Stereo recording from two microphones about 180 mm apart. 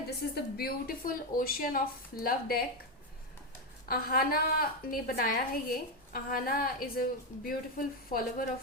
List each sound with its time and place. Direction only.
0.3 s a woman's voice: 60° left (ahead or behind)
3.8 s a woman's voice: 55° left (ahead or behind)